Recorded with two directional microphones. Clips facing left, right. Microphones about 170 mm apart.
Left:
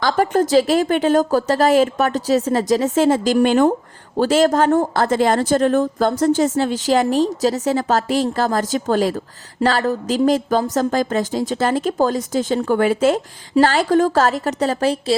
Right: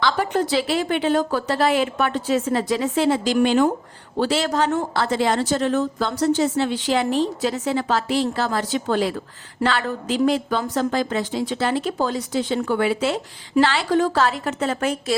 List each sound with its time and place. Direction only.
0.0 s a woman's voice: 45° left (ahead or behind)